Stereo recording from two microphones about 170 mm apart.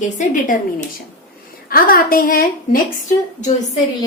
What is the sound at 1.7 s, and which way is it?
A woman's voice, 60° left (ahead or behind).